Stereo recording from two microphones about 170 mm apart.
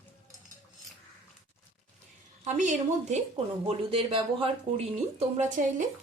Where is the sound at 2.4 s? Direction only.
45° right (ahead or behind).